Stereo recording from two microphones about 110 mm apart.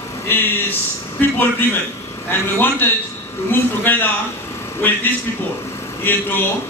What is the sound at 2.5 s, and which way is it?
A man's voice, 20° left (ahead or behind).